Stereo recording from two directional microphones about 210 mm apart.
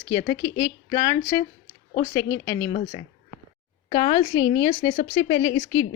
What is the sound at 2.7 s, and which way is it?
Speech, 35° left (ahead or behind).